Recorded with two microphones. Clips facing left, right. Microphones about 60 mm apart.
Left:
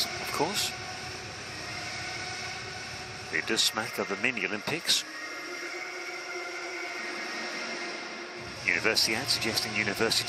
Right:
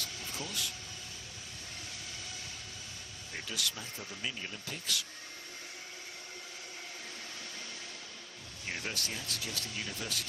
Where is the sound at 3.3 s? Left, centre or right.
Left.